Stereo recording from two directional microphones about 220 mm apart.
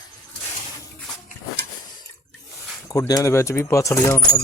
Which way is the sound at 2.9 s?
15° left (ahead or behind).